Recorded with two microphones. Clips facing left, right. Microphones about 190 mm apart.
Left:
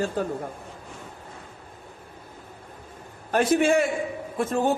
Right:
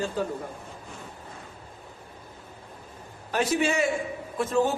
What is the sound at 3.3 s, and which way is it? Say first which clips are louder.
Speech: left 5 dB; 50° left (ahead or behind).